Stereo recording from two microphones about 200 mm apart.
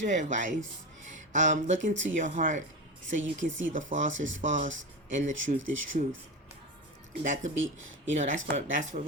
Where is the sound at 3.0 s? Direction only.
70° right (ahead or behind).